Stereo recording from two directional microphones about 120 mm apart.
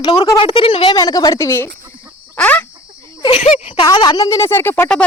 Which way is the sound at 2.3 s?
15° left (ahead or behind).